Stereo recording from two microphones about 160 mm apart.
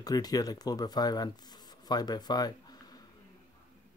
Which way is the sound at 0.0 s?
25° left (ahead or behind).